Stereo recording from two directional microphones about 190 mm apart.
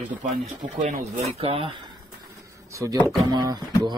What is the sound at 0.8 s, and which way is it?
Speech, 35° right (ahead or behind).